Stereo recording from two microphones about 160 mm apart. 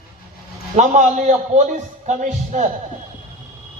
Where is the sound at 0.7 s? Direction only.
50° right (ahead or behind).